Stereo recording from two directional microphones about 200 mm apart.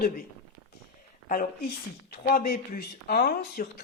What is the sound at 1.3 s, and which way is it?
Speech, 45° left (ahead or behind).